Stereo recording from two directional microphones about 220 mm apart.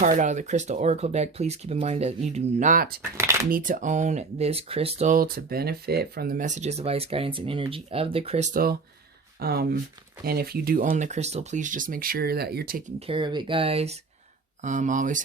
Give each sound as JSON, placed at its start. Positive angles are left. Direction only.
{"t": 0.0, "sound": "speech", "side_deg": -35}
{"t": 3.2, "sound": "shuffling cards", "side_deg": -10}
{"t": 3.5, "sound": "speech", "side_deg": -35}
{"t": 13.1, "sound": "speech", "side_deg": -20}